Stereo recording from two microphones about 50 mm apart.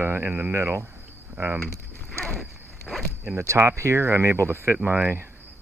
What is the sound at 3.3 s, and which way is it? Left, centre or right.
Speech, right.